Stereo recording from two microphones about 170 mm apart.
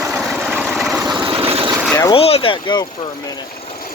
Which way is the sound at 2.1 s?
35° left (ahead or behind).